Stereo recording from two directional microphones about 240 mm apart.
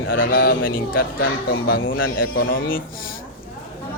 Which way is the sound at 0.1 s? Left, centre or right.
Left.